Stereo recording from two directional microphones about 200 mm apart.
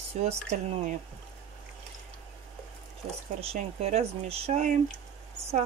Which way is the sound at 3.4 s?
30° right (ahead or behind).